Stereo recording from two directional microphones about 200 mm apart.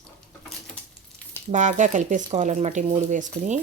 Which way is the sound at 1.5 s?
40° right (ahead or behind).